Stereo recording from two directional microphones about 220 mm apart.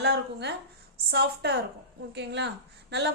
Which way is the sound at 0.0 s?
50° right (ahead or behind).